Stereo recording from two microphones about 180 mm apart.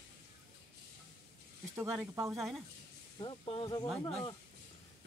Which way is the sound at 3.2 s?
30° left (ahead or behind).